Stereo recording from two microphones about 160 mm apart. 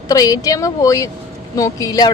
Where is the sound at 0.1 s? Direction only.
20° left (ahead or behind).